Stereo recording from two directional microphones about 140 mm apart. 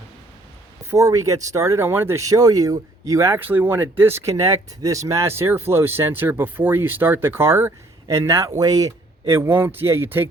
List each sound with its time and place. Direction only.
0.9 s a man's voice: 20° right (ahead or behind)